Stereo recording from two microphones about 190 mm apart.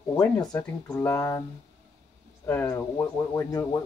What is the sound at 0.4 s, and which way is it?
Speech, 20° left (ahead or behind).